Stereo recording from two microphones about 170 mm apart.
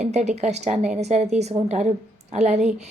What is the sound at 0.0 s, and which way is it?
Speech, 40° right (ahead or behind).